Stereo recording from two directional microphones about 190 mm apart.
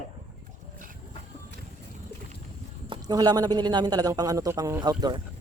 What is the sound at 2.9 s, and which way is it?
A man's voice, 20° right (ahead or behind).